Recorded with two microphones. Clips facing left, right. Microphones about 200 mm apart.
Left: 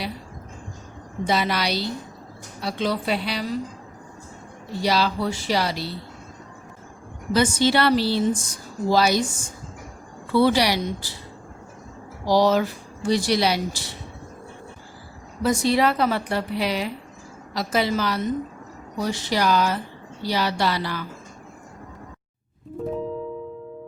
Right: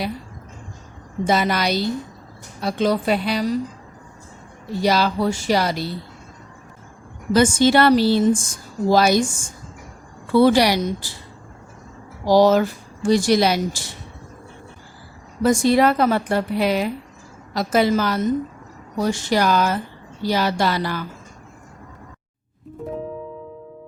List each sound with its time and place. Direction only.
1.2 s a woman's voice: 50° right (ahead or behind)
4.8 s a woman's voice: 50° right (ahead or behind)
7.3 s a woman's voice: 50° right (ahead or behind)
12.2 s a woman's voice: 45° right (ahead or behind)
15.4 s a woman's voice: 50° right (ahead or behind)